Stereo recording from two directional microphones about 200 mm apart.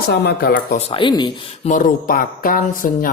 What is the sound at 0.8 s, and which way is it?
Speech, 25° left (ahead or behind).